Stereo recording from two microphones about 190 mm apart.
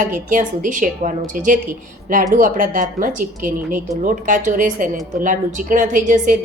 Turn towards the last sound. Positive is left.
turn(degrees=-45)  # may be behind; listen again after turning